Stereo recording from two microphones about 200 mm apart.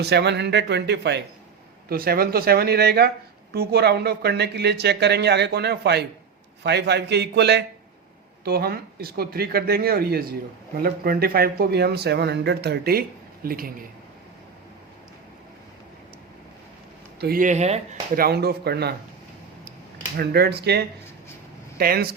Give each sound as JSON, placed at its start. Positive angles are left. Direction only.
{"t": 0.0, "sound": "speech", "side_deg": -55}
{"t": 17.2, "sound": "speech", "side_deg": -50}
{"t": 18.2, "sound": "speech", "side_deg": -55}
{"t": 20.1, "sound": "speech", "side_deg": -55}